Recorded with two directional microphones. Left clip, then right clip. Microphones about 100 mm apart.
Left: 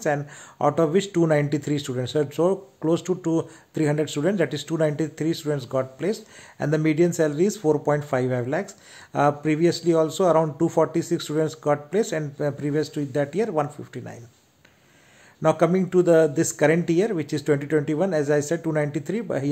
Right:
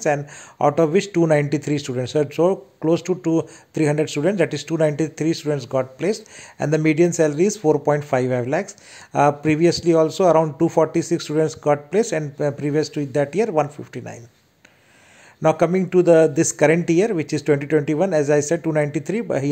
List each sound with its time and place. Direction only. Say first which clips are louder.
0.0 s speech: right 4 dB; 15° right (ahead or behind)
15.4 s speech: right 3 dB; 25° right (ahead or behind)